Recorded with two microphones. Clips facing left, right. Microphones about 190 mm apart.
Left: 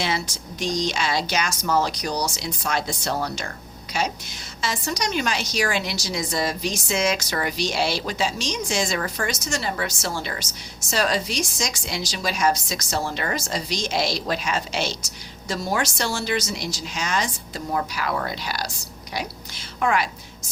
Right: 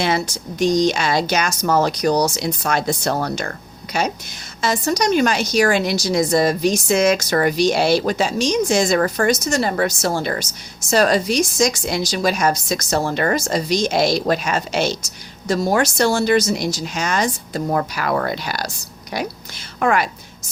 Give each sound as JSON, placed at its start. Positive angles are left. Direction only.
{"t": 0.6, "sound": "a woman's voice", "side_deg": -50}
{"t": 4.6, "sound": "a woman's voice", "side_deg": -45}